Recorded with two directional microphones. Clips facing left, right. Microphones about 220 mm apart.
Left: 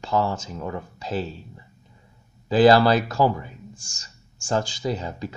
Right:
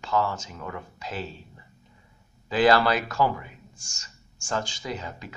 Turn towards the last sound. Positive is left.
turn(degrees=35)  # may be behind; listen again after turning